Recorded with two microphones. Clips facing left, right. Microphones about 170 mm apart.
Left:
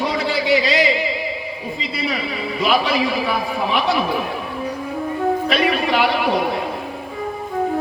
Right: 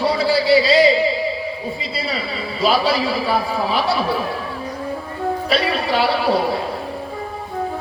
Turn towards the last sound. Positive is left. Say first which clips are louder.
# right 1 dB
turn(degrees=-30)  # may be behind; listen again after turning